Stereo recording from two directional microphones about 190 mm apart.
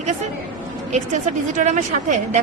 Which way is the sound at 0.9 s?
40° right (ahead or behind).